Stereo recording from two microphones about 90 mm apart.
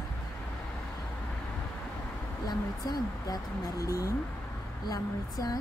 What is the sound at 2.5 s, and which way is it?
Speech, 45° left (ahead or behind).